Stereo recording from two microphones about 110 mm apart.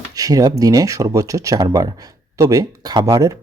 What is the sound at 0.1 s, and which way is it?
A man's voice, 35° right (ahead or behind).